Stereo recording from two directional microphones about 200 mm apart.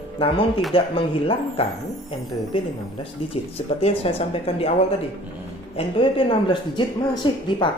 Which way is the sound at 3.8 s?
30° left (ahead or behind).